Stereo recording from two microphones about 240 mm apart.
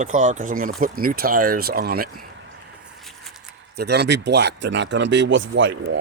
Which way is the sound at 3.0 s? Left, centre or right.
Centre.